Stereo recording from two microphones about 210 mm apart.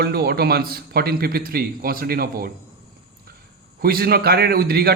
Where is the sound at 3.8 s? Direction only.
45° right (ahead or behind).